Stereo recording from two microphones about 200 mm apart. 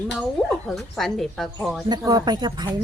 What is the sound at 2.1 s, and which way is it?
Speech, 20° right (ahead or behind).